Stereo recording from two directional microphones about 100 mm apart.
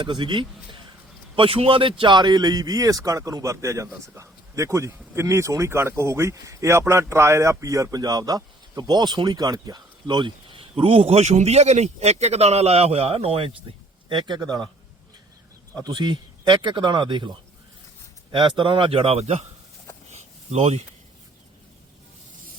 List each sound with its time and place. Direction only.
0.0 s speech: 55° right (ahead or behind)
1.4 s speech: 70° right (ahead or behind); by 14.7 s 45° right (ahead or behind)
15.7 s a man's voice: 45° right (ahead or behind); by 19.5 s 90° right
20.1 s a sound: 90° right